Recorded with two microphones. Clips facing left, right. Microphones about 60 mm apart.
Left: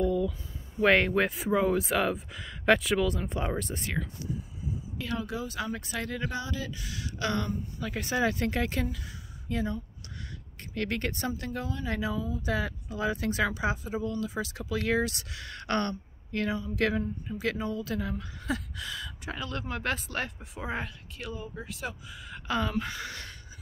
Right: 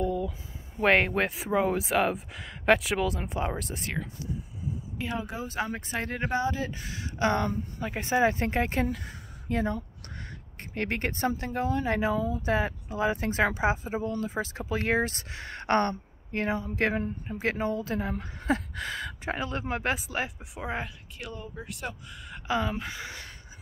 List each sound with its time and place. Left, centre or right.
0.0 s a sound: right
0.8 s speech: centre
4.9 s speech: right
8.9 s speech: right
10.6 s speech: right
18.2 s a sound: right
19.7 s speech: centre